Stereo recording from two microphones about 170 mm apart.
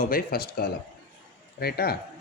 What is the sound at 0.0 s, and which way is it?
Speech, 60° left (ahead or behind).